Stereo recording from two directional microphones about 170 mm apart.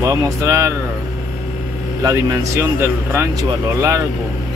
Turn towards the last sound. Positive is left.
turn(degrees=-20)  # may be behind; listen again after turning